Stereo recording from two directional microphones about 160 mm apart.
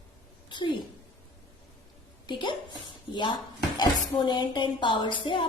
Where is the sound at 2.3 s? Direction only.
30° left (ahead or behind).